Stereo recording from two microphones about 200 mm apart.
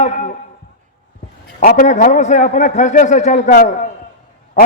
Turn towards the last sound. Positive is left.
turn(degrees=40)  # may be behind; listen again after turning